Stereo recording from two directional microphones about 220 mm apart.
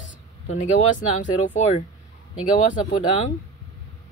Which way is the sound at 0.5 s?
35° left (ahead or behind).